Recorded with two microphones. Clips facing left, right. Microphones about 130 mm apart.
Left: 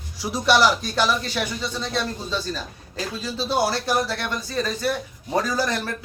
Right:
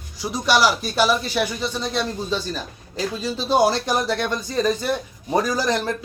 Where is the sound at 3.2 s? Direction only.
15° right (ahead or behind).